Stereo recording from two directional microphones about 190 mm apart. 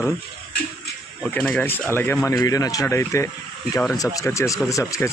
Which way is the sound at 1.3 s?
5° left (ahead or behind).